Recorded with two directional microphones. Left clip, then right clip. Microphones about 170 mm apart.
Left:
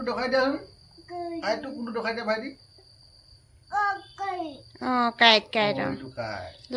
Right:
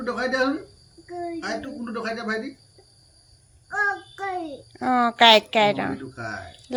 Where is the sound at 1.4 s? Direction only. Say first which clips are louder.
Left 1 dB; 35° left (ahead or behind).